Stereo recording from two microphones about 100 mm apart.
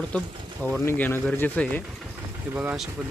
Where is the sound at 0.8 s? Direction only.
20° left (ahead or behind).